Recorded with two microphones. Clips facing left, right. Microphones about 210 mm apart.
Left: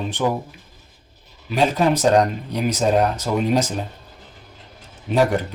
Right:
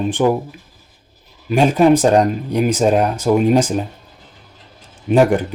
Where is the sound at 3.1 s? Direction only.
50° right (ahead or behind).